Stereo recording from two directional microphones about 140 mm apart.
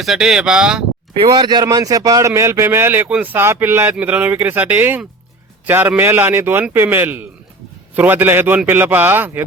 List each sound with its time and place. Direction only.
0.0 s speech: centre (ahead or behind)
1.2 s speech: 30° right (ahead or behind); by 9.4 s 15° right (ahead or behind)